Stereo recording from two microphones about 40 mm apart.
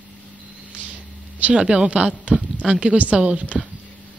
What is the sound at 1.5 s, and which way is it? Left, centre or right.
Speech, right.